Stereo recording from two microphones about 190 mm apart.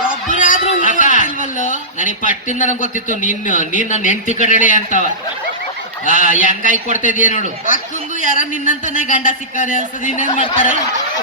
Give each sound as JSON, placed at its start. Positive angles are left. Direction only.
{"t": 0.3, "sound": "speech", "side_deg": 45}
{"t": 6.1, "sound": "speech", "side_deg": 45}